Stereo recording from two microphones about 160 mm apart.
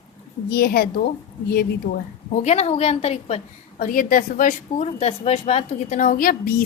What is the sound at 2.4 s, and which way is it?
Speech, 40° left (ahead or behind).